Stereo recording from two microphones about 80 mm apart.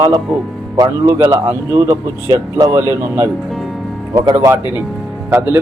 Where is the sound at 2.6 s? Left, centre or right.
Right.